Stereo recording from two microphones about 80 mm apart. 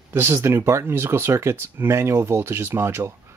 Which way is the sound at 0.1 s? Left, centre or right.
Right.